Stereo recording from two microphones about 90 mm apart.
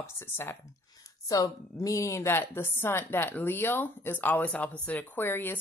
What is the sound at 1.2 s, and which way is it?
A woman's voice, 40° left (ahead or behind).